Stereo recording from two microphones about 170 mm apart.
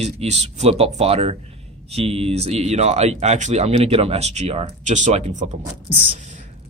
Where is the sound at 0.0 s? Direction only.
40° right (ahead or behind).